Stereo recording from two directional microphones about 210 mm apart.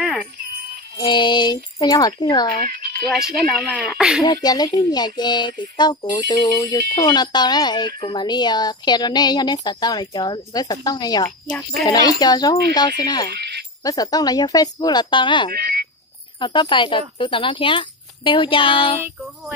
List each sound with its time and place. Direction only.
0.9 s speech: 20° left (ahead or behind)
3.1 s speech: centre (ahead or behind)
4.2 s speech: 20° left (ahead or behind)
13.4 s music: 50° right (ahead or behind)
13.8 s speech: 15° left (ahead or behind)
15.5 s frog: 45° right (ahead or behind)
16.3 s speech: 20° left (ahead or behind)
19.0 s speech: 5° right (ahead or behind)